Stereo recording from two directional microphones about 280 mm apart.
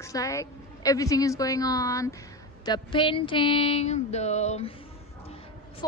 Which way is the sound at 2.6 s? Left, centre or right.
Centre.